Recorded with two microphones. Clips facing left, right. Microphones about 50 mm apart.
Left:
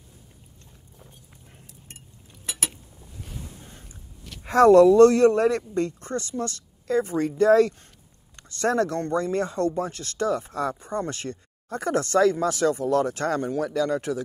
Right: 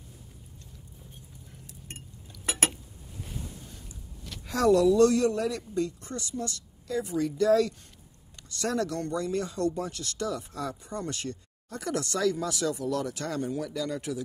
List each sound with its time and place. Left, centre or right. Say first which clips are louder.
1.9 s chink: right 3 dB; right
4.5 s speech: left 8 dB; left